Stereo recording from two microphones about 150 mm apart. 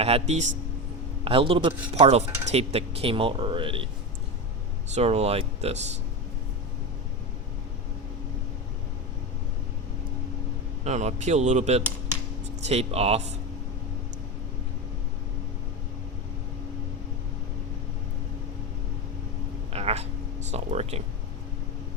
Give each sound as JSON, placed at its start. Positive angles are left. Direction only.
{"t": 0.0, "sound": "speech", "side_deg": -45}
{"t": 1.2, "sound": "speech", "side_deg": -35}
{"t": 4.9, "sound": "speech", "side_deg": -40}
{"t": 10.8, "sound": "speech", "side_deg": -50}
{"t": 19.7, "sound": "cat", "side_deg": -45}
{"t": 20.5, "sound": "speech", "side_deg": -45}